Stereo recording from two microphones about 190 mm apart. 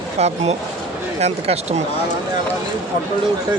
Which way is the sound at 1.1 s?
35° right (ahead or behind).